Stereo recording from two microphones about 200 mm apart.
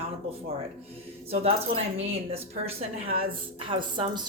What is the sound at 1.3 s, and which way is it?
Speech, 30° right (ahead or behind).